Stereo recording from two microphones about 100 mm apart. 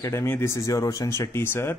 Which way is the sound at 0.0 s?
25° left (ahead or behind).